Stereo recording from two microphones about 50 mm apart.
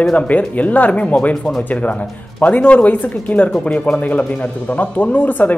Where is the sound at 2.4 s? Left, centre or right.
Left.